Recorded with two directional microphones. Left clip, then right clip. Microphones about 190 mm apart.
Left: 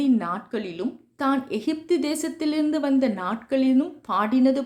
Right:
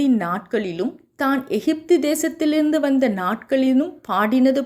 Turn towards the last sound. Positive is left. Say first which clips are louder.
# right 4 dB
turn(degrees=-15)  # may be behind; listen again after turning